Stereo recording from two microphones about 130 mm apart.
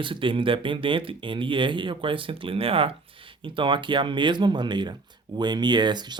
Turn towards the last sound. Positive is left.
turn(degrees=-35)  # may be behind; listen again after turning